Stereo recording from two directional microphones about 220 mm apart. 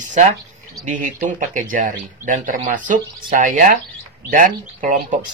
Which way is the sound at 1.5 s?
35° right (ahead or behind).